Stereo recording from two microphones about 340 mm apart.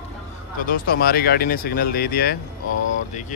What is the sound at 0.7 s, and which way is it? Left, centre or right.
Speech, left.